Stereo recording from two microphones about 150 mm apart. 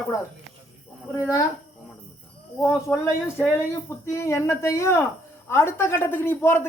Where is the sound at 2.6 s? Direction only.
20° left (ahead or behind).